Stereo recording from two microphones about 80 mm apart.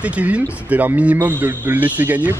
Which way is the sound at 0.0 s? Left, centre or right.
Centre.